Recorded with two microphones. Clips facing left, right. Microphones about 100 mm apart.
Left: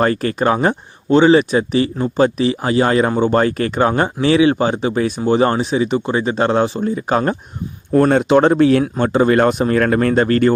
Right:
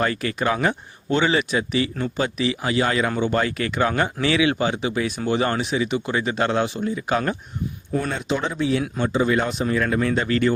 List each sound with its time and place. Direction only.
0.0 s speech: 40° left (ahead or behind)
7.9 s speech: 60° left (ahead or behind)